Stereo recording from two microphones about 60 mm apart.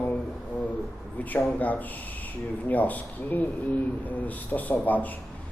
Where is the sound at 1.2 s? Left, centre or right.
Left.